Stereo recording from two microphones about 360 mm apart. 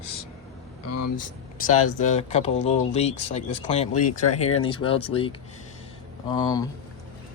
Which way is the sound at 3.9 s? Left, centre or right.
Left.